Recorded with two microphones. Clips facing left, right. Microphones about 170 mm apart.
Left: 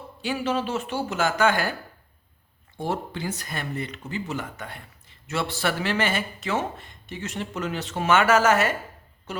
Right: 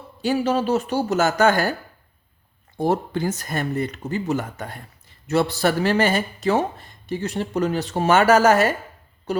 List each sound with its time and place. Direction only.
0.2 s speech: 40° right (ahead or behind)
2.7 s speech: 40° right (ahead or behind)